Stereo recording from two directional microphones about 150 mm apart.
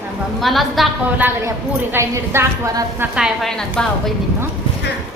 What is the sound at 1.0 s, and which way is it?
A woman's voice, 15° right (ahead or behind).